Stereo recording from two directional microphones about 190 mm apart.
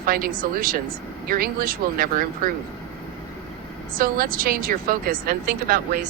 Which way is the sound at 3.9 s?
50° right (ahead or behind).